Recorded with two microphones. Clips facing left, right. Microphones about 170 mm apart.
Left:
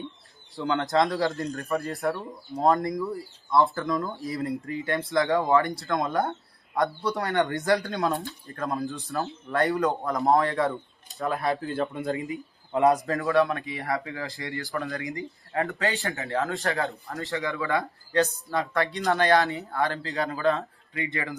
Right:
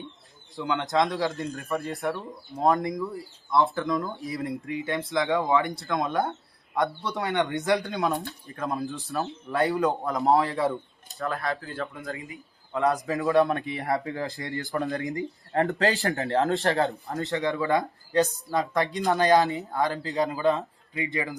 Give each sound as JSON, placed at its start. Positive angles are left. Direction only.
{"t": 0.6, "sound": "speech", "side_deg": 0}
{"t": 9.2, "sound": "speech", "side_deg": 0}
{"t": 11.2, "sound": "speech", "side_deg": 20}
{"t": 13.1, "sound": "speech", "side_deg": -20}
{"t": 15.8, "sound": "speech", "side_deg": -35}
{"t": 16.9, "sound": "speech", "side_deg": -20}